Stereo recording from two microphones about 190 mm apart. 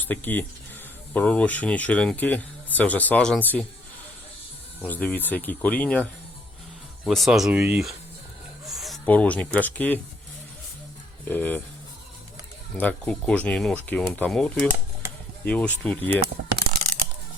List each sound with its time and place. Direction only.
0.0 s speech: 10° left (ahead or behind)
4.8 s speech: 10° left (ahead or behind)
7.6 s speech: 15° right (ahead or behind)
8.6 s speech: centre (ahead or behind)
11.3 s speech: 10° left (ahead or behind)
12.7 s speech: 5° left (ahead or behind)
16.2 s a sound: 55° right (ahead or behind)